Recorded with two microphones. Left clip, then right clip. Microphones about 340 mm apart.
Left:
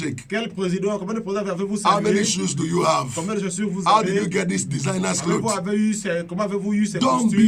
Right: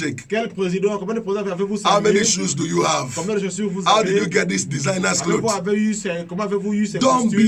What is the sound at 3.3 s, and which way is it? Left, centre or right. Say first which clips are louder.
Speech: right 6 dB; left.